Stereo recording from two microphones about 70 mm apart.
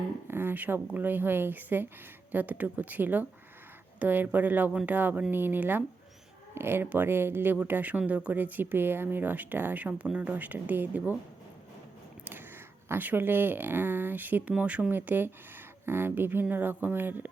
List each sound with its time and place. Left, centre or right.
0.3 s speech: right
12.2 s a sound: right
12.9 s speech: right